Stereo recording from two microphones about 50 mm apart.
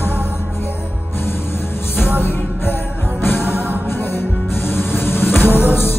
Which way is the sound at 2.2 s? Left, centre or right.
Left.